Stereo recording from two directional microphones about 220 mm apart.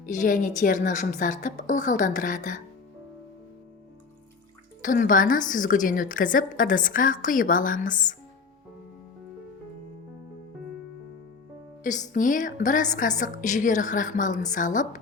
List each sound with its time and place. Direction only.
0.0 s a woman's voice: 35° left (ahead or behind)
4.8 s a woman's voice: 35° left (ahead or behind)
11.8 s a woman's voice: 35° left (ahead or behind)